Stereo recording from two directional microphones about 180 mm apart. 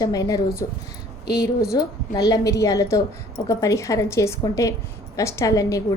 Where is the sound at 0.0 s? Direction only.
20° left (ahead or behind).